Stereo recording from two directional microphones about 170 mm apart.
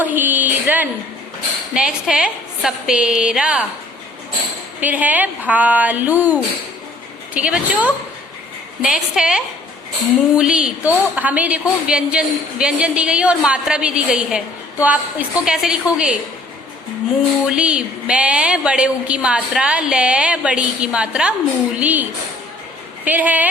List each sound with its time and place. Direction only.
0.0 s a sound: 10° right (ahead or behind)
1.7 s a woman's voice: 5° right (ahead or behind)
4.8 s a woman's voice: 10° right (ahead or behind)
17.4 s a woman's voice: 5° right (ahead or behind)
23.0 s a woman's voice: 10° right (ahead or behind)